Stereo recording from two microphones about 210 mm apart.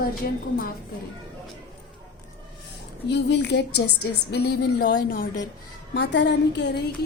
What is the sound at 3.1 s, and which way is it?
A woman's voice, 55° left (ahead or behind).